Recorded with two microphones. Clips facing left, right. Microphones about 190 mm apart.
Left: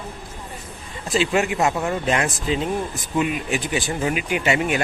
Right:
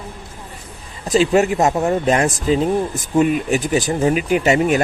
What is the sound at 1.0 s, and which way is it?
Speech, 40° right (ahead or behind).